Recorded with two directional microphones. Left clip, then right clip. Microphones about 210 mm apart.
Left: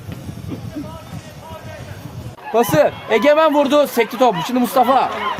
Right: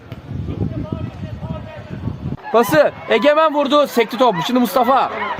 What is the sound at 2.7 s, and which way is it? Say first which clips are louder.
Speech: right 1 dB; 35° right (ahead or behind).